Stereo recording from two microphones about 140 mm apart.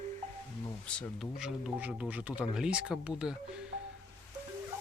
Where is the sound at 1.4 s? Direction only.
5° right (ahead or behind).